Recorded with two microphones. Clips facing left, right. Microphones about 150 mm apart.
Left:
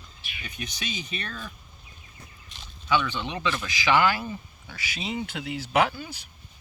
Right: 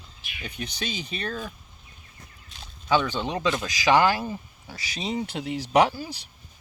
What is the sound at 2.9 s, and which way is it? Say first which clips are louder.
Speech: right 3 dB; 40° right (ahead or behind).